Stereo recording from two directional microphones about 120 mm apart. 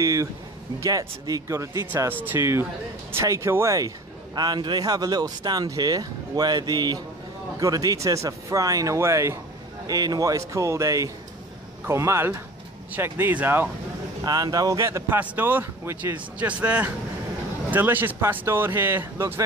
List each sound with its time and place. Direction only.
0.0 s speech: 25° right (ahead or behind)
4.4 s speech: 40° right (ahead or behind); by 13.7 s 15° right (ahead or behind)
14.2 s speech: 30° right (ahead or behind)